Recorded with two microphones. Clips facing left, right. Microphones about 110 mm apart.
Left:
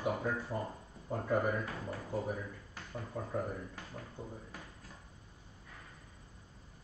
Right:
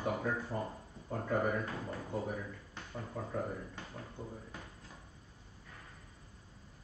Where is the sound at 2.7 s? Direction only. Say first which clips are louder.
Left 1 dB; centre (ahead or behind).